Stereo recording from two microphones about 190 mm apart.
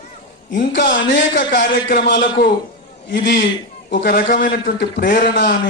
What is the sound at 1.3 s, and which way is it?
A man's voice, 60° left (ahead or behind).